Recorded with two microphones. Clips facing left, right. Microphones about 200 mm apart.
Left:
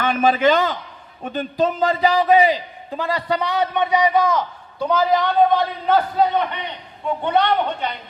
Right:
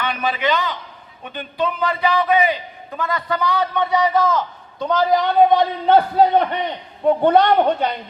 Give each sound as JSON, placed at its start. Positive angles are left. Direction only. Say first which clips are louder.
{"t": 0.0, "sound": "a man's voice", "louder": "left 5 dB", "side_deg": 45}
{"t": 5.4, "sound": "a man's voice", "louder": "right 3 dB", "side_deg": -10}
{"t": 5.9, "sound": "a woman's voice", "louder": "right 4 dB", "side_deg": -35}